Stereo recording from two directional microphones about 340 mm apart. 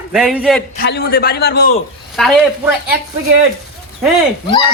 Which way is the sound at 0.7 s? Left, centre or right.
Left.